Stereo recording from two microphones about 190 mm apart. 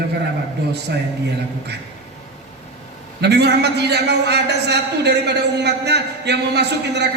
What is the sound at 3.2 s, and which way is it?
A man's voice, 60° right (ahead or behind).